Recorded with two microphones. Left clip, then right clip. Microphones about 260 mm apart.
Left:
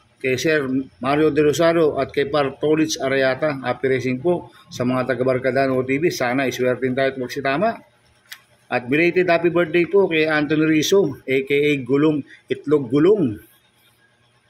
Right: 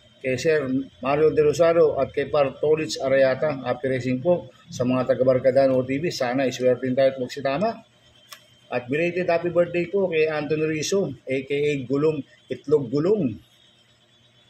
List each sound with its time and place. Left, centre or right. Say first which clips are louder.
0.2 s a man's voice: left 3 dB; left